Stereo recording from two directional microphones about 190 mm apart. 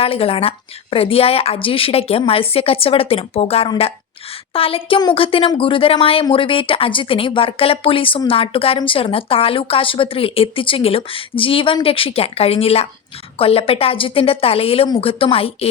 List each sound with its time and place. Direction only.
0.0 s a woman's voice: 30° left (ahead or behind)